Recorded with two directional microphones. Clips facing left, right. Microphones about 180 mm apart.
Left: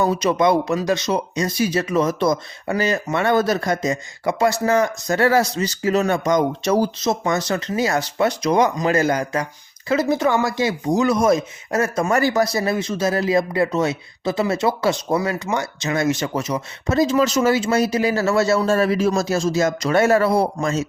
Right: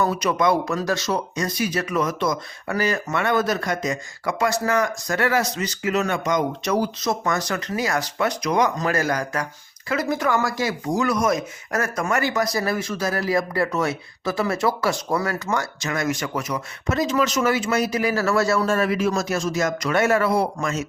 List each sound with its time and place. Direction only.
0.0 s speech: 25° left (ahead or behind)